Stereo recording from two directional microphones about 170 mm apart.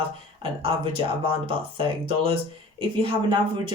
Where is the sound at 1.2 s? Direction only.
30° right (ahead or behind).